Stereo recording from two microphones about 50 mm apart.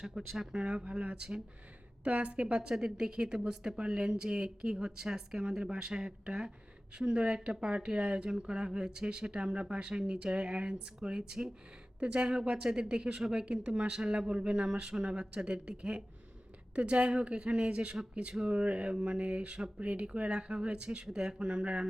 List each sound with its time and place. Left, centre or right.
0.1 s speech: centre